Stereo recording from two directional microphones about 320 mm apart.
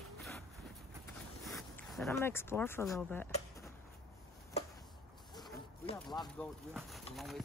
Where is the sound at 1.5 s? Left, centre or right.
Centre.